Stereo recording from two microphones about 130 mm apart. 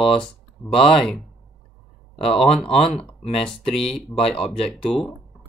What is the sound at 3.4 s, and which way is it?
Speech, 5° left (ahead or behind).